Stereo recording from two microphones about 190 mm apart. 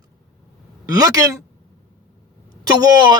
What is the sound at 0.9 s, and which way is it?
Speech, 20° right (ahead or behind).